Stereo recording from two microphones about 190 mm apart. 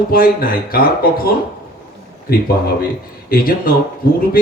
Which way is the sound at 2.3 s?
50° left (ahead or behind).